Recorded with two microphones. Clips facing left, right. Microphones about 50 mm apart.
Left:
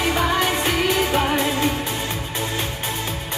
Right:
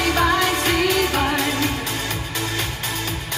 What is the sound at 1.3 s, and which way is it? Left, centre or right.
Music, left.